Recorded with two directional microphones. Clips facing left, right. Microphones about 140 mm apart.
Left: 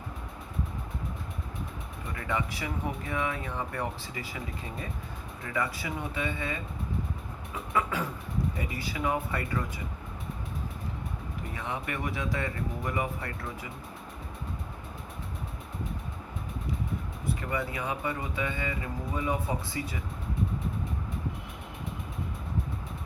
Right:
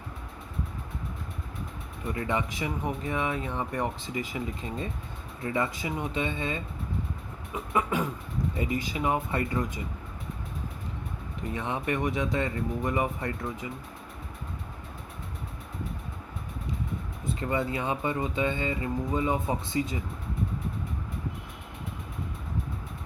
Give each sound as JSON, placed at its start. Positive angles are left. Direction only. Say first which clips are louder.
{"t": 2.1, "sound": "speech", "louder": "right 2 dB", "side_deg": -25}
{"t": 7.7, "sound": "speech", "louder": "right 2 dB", "side_deg": -20}
{"t": 11.5, "sound": "speech", "louder": "right 6 dB", "side_deg": -25}
{"t": 17.2, "sound": "speech", "louder": "right 4 dB", "side_deg": -25}